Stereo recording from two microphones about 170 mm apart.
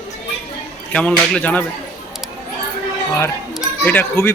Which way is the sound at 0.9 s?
5° left (ahead or behind).